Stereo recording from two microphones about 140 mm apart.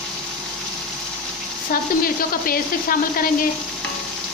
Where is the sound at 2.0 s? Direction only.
90° left.